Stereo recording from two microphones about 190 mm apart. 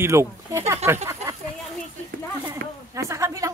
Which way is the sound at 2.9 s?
15° right (ahead or behind).